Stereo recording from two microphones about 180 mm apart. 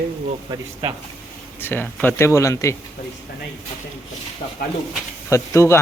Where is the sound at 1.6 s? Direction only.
10° left (ahead or behind).